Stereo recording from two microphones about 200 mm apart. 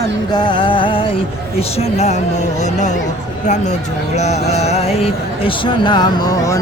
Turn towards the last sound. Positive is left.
turn(degrees=20)  # may be behind; listen again after turning